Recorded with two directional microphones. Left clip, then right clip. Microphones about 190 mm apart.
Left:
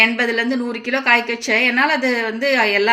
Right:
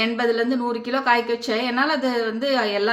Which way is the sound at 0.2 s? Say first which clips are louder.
Left 2 dB; 10° left (ahead or behind).